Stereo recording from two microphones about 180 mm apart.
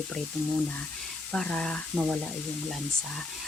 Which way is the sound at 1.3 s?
5° left (ahead or behind).